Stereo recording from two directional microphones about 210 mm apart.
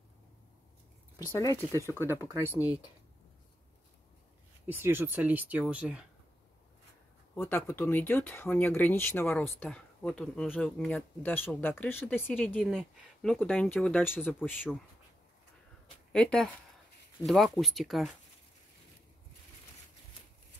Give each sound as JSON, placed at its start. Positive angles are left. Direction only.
{"t": 1.6, "sound": "speech", "side_deg": 15}
{"t": 2.0, "sound": "speech", "side_deg": -15}
{"t": 2.5, "sound": "speech", "side_deg": 15}
{"t": 4.6, "sound": "speech", "side_deg": -10}
{"t": 7.3, "sound": "speech", "side_deg": 10}
{"t": 16.1, "sound": "speech", "side_deg": 5}